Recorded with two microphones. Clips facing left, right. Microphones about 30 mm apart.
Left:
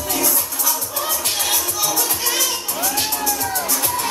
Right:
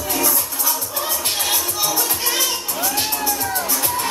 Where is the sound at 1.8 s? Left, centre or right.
Centre.